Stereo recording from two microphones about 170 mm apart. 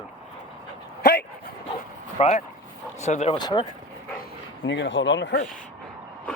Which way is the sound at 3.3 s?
30° left (ahead or behind).